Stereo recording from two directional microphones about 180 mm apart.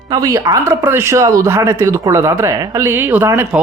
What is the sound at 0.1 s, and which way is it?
Speech, 20° right (ahead or behind).